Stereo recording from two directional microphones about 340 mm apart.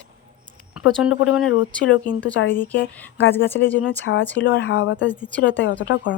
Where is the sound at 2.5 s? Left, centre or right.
Centre.